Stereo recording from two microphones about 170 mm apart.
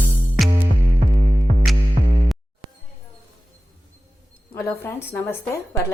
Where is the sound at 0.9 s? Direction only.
45° right (ahead or behind).